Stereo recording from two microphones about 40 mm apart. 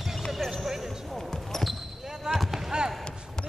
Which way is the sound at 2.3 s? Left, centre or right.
Centre.